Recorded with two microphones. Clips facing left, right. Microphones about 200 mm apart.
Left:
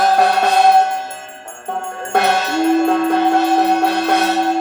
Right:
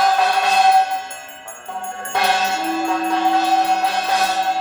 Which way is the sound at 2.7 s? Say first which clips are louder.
Left 6 dB; 60° left (ahead or behind).